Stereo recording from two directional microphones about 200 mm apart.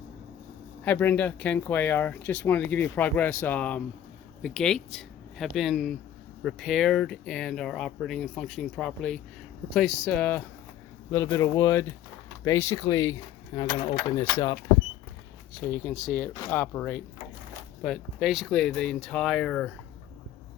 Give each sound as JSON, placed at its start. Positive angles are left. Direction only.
{"t": 0.9, "sound": "speech", "side_deg": 10}
{"t": 14.2, "sound": "speech", "side_deg": 15}
{"t": 15.6, "sound": "speech", "side_deg": 10}